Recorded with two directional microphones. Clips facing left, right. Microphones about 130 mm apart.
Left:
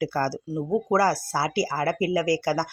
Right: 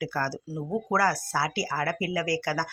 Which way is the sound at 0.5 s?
20° left (ahead or behind).